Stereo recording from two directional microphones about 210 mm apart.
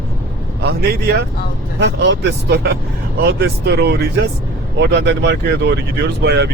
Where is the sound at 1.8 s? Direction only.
55° right (ahead or behind).